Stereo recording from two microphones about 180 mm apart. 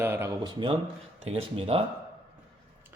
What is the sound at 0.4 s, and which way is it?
Speech, 25° right (ahead or behind).